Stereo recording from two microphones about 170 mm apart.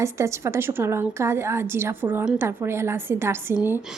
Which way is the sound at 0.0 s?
15° right (ahead or behind).